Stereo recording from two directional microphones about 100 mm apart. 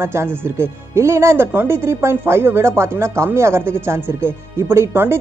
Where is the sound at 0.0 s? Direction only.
25° right (ahead or behind).